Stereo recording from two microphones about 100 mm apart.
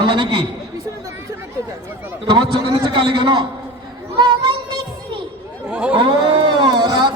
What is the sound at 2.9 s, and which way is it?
Speech, 55° right (ahead or behind).